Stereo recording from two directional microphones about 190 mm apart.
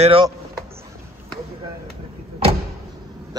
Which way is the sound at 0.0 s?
30° right (ahead or behind).